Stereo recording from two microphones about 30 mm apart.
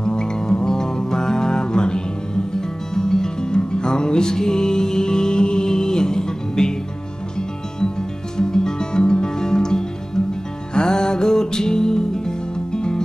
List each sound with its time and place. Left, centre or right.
0.0 s music: left
8.4 s music: left